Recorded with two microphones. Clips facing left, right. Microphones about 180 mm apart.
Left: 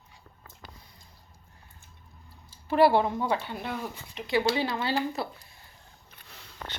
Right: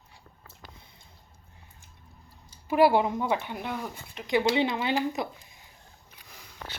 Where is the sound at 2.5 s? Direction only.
15° right (ahead or behind).